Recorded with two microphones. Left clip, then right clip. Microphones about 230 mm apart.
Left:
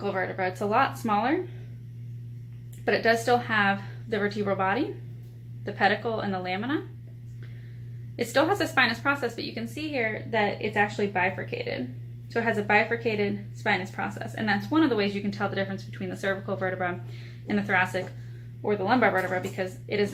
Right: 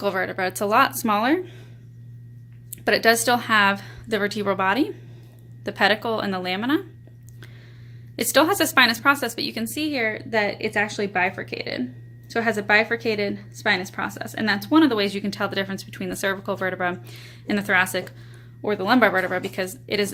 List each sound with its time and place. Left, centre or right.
0.0 s a woman's voice: right
2.8 s a woman's voice: right
8.1 s a woman's voice: right